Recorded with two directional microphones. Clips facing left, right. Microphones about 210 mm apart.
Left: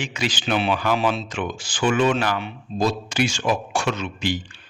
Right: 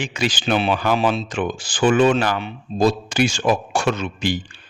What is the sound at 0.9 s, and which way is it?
Speech, 30° right (ahead or behind).